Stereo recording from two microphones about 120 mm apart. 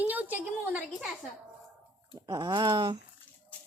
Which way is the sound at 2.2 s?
35° right (ahead or behind).